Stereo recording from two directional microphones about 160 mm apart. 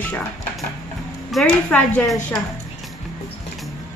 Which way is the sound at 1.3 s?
5° left (ahead or behind).